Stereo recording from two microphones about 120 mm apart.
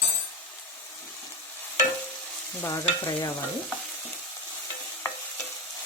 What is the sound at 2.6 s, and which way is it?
Stir, 25° left (ahead or behind).